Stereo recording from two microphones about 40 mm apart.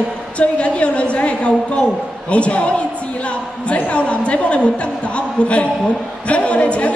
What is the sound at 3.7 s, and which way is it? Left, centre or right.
Speech, left.